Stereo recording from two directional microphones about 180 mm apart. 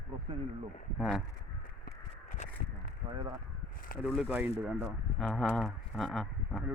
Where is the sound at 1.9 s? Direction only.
45° left (ahead or behind).